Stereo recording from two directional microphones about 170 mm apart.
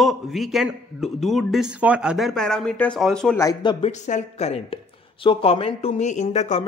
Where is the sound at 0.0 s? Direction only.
Centre (ahead or behind).